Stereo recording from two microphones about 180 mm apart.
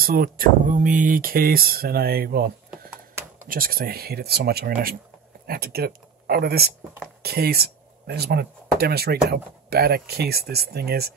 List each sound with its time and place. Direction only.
0.0 s speech: 55° right (ahead or behind)